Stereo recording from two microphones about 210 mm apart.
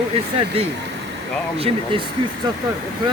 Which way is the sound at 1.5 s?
25° right (ahead or behind).